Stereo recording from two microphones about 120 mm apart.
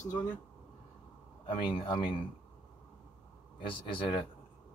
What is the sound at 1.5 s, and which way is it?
Speech, 45° left (ahead or behind).